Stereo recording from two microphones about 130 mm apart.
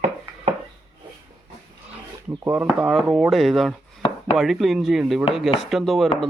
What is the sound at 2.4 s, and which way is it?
Speech, 15° right (ahead or behind).